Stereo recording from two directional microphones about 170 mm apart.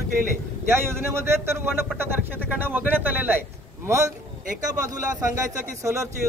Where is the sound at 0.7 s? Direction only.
15° right (ahead or behind).